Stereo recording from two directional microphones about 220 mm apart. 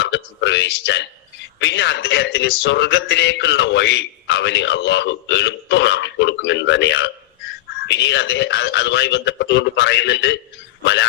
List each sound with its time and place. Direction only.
0.0 s a man's voice: 55° left (ahead or behind)